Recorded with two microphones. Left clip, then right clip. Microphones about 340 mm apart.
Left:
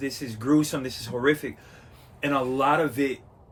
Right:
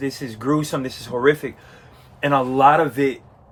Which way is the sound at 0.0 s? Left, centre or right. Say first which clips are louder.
Right 5 dB; centre.